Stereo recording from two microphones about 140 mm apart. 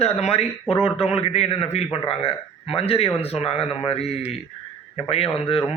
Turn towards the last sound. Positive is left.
turn(degrees=45)  # may be behind; listen again after turning